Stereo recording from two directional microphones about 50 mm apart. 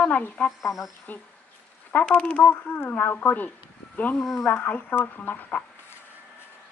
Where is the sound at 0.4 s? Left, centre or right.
Left.